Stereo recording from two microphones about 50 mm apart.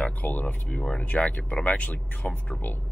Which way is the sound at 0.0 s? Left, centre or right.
Left.